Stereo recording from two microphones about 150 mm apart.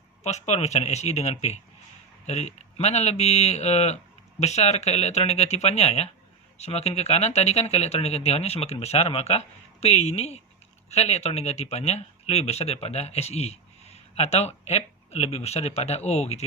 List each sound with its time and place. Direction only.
0.2 s speech: 50° left (ahead or behind)